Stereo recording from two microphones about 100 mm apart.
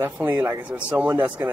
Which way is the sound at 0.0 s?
20° right (ahead or behind).